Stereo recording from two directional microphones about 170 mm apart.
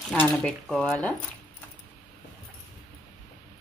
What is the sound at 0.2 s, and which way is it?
Speech, 5° left (ahead or behind).